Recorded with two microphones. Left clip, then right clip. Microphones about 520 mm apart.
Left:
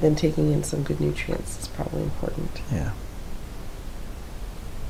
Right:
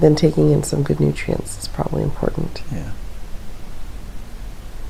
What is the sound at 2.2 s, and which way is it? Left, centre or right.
Speech, right.